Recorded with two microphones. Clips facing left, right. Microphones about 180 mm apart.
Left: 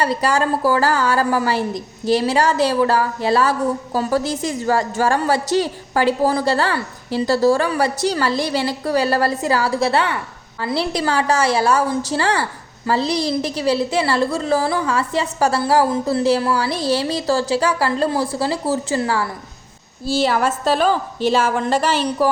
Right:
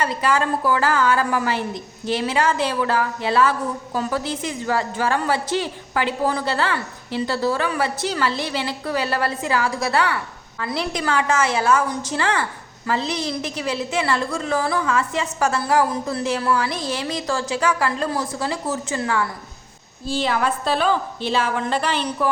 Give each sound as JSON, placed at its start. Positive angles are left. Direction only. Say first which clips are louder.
{"t": 0.0, "sound": "a woman's voice", "louder": "left 3 dB", "side_deg": 40}